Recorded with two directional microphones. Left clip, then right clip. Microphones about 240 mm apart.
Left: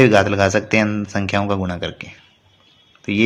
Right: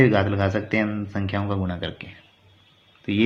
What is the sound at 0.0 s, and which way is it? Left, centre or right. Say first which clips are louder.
A man's voice: left 7 dB; left.